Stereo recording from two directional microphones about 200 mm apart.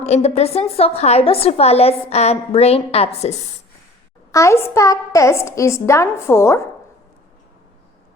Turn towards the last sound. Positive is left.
turn(degrees=15)  # may be behind; listen again after turning